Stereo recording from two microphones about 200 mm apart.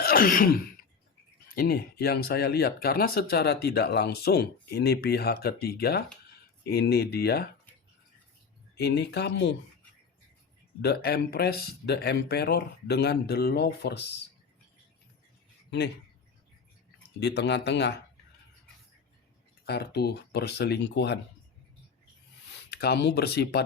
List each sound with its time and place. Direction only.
0.0 s throat clearing: 45° left (ahead or behind)
1.5 s speech: 50° left (ahead or behind)
8.7 s speech: 55° left (ahead or behind)
10.8 s speech: 50° left (ahead or behind)
17.2 s speech: 60° left (ahead or behind)
19.6 s speech: 55° left (ahead or behind)
22.7 s speech: 55° left (ahead or behind)